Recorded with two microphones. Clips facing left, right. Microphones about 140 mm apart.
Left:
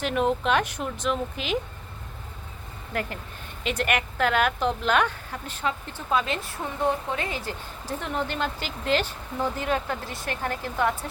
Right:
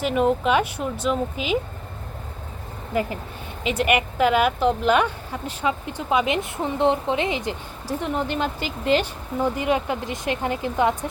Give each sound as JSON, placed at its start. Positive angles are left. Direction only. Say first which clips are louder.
{"t": 0.0, "sound": "speech", "louder": "right 4 dB", "side_deg": 0}
{"t": 2.9, "sound": "speech", "louder": "right 6 dB", "side_deg": -5}